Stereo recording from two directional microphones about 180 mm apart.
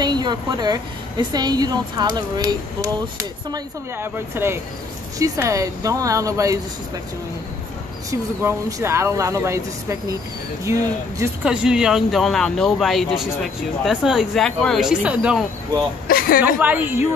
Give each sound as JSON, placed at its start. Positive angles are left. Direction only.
{"t": 0.0, "sound": "a woman's voice", "side_deg": -25}
{"t": 8.1, "sound": "speech", "side_deg": -15}
{"t": 11.4, "sound": "speech", "side_deg": -5}
{"t": 16.1, "sound": "a man's voice", "side_deg": 55}
{"t": 16.5, "sound": "speech", "side_deg": -10}